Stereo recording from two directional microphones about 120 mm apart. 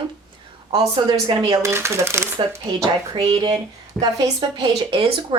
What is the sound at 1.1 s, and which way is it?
Speech, 30° right (ahead or behind).